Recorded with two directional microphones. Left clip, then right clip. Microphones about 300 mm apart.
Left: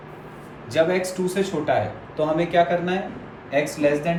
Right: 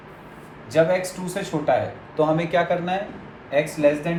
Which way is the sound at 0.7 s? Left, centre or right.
Centre.